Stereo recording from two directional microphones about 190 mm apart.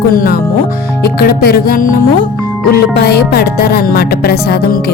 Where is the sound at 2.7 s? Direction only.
55° left (ahead or behind).